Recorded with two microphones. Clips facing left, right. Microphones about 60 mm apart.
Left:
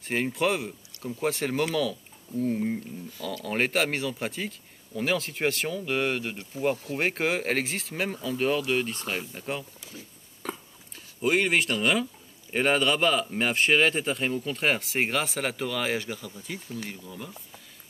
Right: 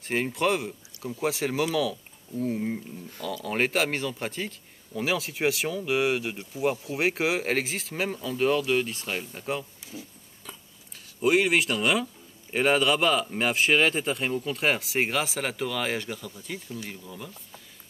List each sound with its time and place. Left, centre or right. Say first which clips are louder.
0.0 s speech: even; centre
10.4 s a sound: left 10 dB; left
11.1 s speech: right 2 dB; centre